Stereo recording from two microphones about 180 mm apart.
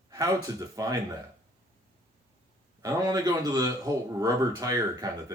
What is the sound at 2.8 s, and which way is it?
A man's voice, 20° right (ahead or behind).